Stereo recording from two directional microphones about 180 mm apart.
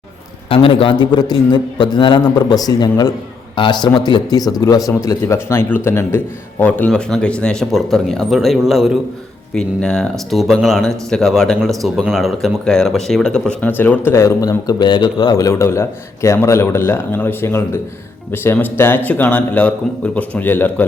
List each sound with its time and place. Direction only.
0.4 s a man's voice: 30° left (ahead or behind); by 20.8 s 10° left (ahead or behind)